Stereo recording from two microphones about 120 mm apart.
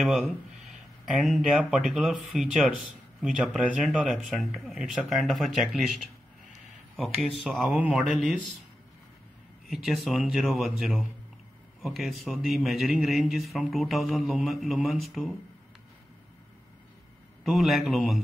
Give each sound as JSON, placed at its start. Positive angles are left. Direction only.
{"t": 0.0, "sound": "a man's voice", "side_deg": 0}
{"t": 9.7, "sound": "a man's voice", "side_deg": 0}
{"t": 17.4, "sound": "a man's voice", "side_deg": 0}